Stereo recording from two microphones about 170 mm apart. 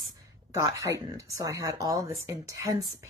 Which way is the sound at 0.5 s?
15° right (ahead or behind).